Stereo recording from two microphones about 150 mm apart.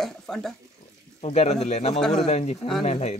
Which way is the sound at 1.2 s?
45° left (ahead or behind).